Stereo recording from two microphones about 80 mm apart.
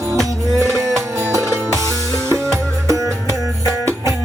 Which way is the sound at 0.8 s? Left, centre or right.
Right.